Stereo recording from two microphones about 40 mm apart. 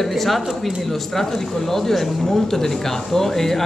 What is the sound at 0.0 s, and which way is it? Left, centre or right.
Speech, centre.